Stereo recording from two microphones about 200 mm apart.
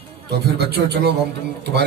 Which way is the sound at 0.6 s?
55° right (ahead or behind).